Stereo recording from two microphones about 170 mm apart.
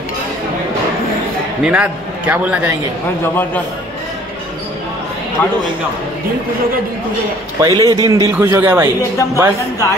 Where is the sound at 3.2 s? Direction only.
10° left (ahead or behind).